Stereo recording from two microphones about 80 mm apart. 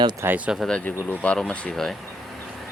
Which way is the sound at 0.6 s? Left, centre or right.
Centre.